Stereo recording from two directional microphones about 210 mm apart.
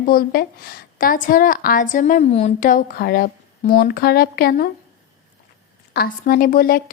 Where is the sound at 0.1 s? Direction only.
45° left (ahead or behind).